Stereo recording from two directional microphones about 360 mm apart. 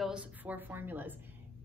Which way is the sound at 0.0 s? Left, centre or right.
Centre.